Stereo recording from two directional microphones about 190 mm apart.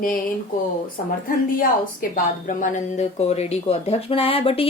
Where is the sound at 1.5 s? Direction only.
45° left (ahead or behind); by 4.7 s 30° left (ahead or behind).